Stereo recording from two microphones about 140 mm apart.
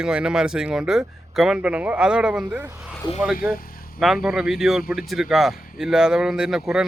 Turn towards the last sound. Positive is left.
turn(degrees=-5)  # may be behind; listen again after turning